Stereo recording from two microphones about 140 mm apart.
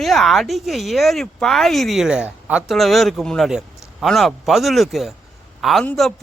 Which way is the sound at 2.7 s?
Centre (ahead or behind).